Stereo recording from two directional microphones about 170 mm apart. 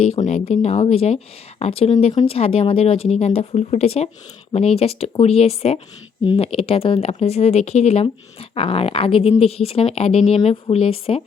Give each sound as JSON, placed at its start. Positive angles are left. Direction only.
{"t": 0.3, "sound": "speech", "side_deg": 45}